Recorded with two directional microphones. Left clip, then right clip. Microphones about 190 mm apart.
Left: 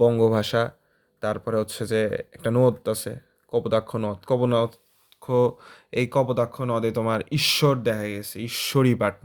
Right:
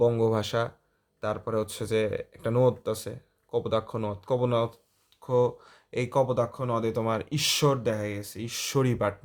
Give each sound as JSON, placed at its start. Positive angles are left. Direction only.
{"t": 0.0, "sound": "speech", "side_deg": 30}